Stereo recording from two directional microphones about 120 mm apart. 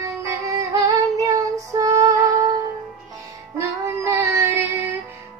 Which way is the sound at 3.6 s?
20° right (ahead or behind).